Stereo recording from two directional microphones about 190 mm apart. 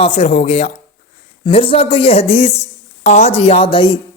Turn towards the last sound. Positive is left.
turn(degrees=25)  # may be behind; listen again after turning